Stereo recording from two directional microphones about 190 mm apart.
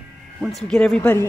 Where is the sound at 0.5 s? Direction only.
5° left (ahead or behind).